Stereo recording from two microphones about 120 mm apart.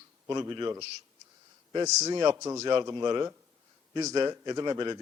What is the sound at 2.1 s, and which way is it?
A man's voice, 35° right (ahead or behind).